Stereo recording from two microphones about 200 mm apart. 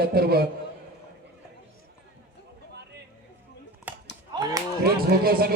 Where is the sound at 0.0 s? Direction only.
50° right (ahead or behind).